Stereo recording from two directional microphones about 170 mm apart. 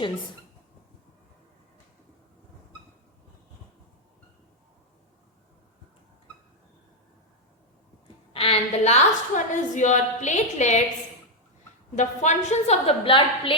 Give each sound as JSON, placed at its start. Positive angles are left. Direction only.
{"t": 8.3, "sound": "a woman's voice", "side_deg": 35}
{"t": 11.9, "sound": "a woman's voice", "side_deg": 45}